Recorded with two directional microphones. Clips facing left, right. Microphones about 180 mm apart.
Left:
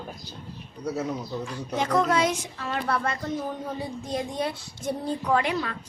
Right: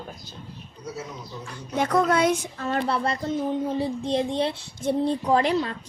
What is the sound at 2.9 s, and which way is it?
A child's voice, 35° right (ahead or behind).